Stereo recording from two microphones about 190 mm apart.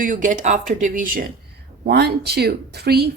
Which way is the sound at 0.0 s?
45° right (ahead or behind).